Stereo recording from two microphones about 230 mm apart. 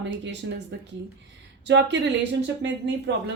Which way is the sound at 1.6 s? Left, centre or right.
Right.